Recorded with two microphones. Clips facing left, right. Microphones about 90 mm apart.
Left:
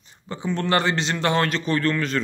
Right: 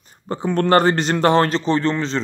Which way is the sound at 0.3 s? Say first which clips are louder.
Right 7 dB; 50° right (ahead or behind).